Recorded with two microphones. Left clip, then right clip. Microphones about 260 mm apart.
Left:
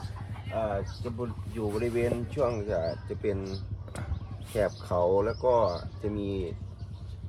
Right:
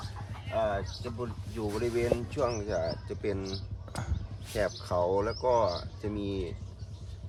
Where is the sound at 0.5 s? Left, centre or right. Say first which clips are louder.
Right 1 dB; right.